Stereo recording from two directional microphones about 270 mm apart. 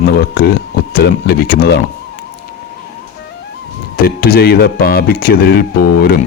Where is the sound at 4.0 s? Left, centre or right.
Left.